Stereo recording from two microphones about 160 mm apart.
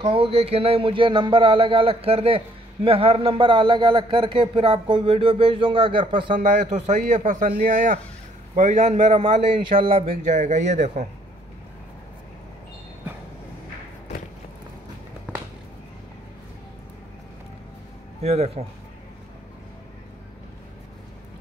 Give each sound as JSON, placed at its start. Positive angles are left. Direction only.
{"t": 0.0, "sound": "speech", "side_deg": -35}
{"t": 6.4, "sound": "a man's voice", "side_deg": -50}
{"t": 9.2, "sound": "a man's voice", "side_deg": -35}
{"t": 18.2, "sound": "speech", "side_deg": -40}